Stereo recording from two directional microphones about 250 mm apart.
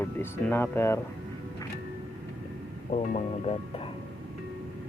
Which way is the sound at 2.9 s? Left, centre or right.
Left.